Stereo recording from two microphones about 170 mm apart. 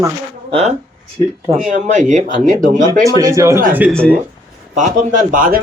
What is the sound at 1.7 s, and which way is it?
Speech, 45° right (ahead or behind).